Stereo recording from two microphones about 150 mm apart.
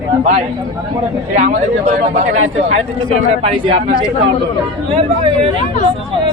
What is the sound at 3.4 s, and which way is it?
Speech, 40° right (ahead or behind).